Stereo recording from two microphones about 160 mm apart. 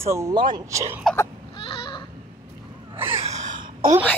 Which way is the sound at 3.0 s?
40° right (ahead or behind).